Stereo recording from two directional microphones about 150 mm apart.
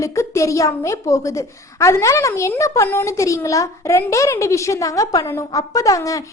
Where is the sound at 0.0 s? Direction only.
20° left (ahead or behind).